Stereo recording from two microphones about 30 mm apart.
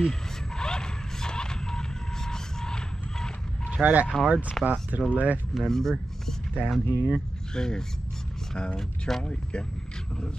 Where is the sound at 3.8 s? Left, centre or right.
Right.